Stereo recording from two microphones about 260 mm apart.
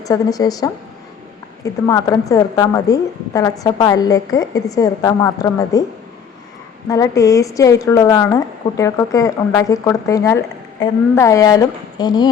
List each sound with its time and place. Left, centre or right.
0.0 s a woman's voice: centre
6.8 s a woman's voice: centre